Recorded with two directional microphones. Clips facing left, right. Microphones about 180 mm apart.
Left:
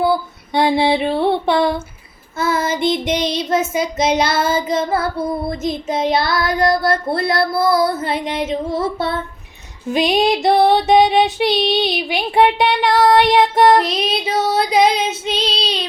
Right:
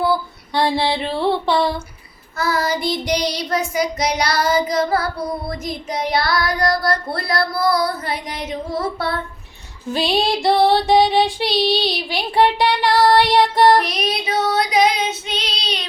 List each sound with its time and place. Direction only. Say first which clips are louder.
0.0 s child singing: left 2 dB; 20° left (ahead or behind)